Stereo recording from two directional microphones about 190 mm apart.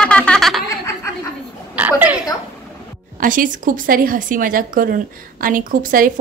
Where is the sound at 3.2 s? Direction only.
45° right (ahead or behind).